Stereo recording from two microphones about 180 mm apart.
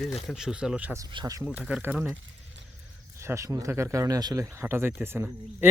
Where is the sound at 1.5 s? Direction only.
5° right (ahead or behind).